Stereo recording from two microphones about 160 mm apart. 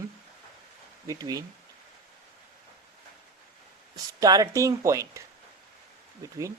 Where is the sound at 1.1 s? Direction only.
20° right (ahead or behind).